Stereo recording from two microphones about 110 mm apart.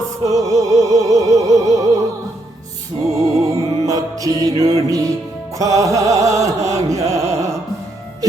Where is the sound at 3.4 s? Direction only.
30° right (ahead or behind).